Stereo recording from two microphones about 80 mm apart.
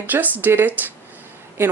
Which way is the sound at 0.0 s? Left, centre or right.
Right.